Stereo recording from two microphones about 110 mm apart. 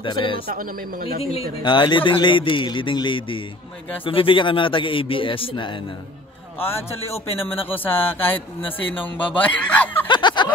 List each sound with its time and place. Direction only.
0.0 s a man's voice: 50° left (ahead or behind)
1.6 s a man's voice: 45° left (ahead or behind)
7.7 s speech: 15° left (ahead or behind)
8.6 s a man's voice: 50° left (ahead or behind)
9.0 s speech: 15° left (ahead or behind)
10.0 s a sound: 45° left (ahead or behind)